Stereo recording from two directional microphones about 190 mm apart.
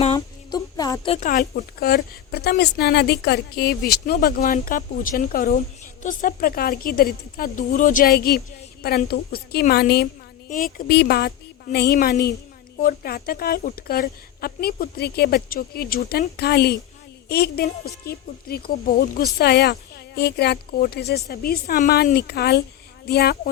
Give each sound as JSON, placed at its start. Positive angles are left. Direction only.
{"t": 0.5, "sound": "a sound", "side_deg": 20}
{"t": 1.2, "sound": "a woman's voice", "side_deg": 45}
{"t": 10.5, "sound": "a woman's voice", "side_deg": 50}